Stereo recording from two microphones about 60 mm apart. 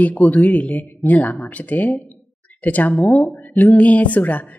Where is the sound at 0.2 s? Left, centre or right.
Left.